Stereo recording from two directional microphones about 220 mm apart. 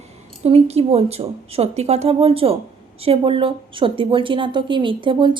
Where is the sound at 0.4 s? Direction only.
30° right (ahead or behind).